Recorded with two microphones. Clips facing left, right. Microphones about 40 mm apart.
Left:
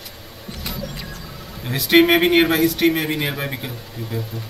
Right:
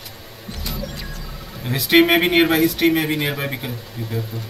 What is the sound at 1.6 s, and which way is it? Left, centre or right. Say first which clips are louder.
Speech: even; centre.